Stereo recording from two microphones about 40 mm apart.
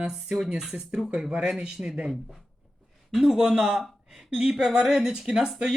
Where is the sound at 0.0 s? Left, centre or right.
Centre.